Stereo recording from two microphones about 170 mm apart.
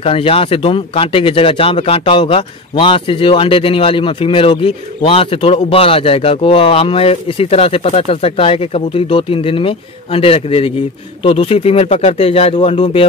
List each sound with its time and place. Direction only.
0.0 s speech: 35° left (ahead or behind)